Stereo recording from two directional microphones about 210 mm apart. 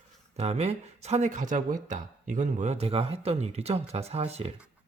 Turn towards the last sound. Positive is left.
turn(degrees=-30)  # may be behind; listen again after turning